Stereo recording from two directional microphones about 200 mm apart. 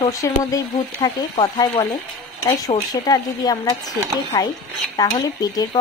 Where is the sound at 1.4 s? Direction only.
30° left (ahead or behind).